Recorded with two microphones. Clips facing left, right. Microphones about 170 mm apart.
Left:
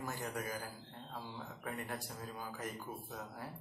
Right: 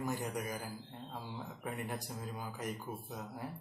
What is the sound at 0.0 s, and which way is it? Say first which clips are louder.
A man's voice: right 4 dB; 20° right (ahead or behind).